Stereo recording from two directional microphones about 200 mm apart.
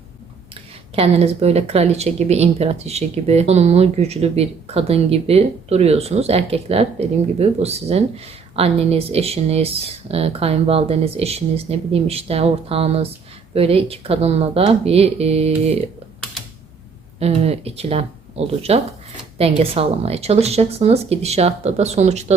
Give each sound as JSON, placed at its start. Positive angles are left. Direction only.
{"t": 0.5, "sound": "speech", "side_deg": -30}
{"t": 17.2, "sound": "speech", "side_deg": -30}